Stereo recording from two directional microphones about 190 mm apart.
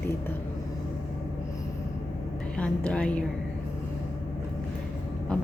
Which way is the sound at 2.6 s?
5° left (ahead or behind).